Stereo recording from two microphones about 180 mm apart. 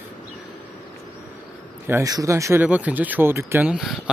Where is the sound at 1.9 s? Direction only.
15° right (ahead or behind).